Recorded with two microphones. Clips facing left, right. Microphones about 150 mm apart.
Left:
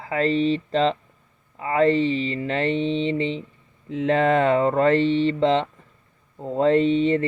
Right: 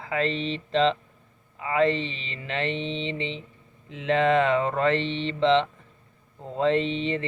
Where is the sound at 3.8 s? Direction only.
40° left (ahead or behind).